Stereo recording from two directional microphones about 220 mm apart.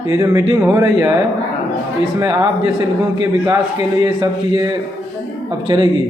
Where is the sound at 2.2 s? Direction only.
15° right (ahead or behind).